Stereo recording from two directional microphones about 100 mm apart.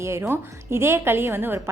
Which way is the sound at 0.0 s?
25° right (ahead or behind).